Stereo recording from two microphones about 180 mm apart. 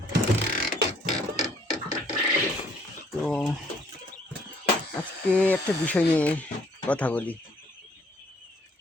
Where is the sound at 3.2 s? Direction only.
Centre (ahead or behind).